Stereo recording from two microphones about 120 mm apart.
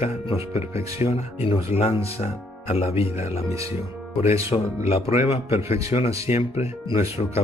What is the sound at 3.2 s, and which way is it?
Speech, 25° right (ahead or behind).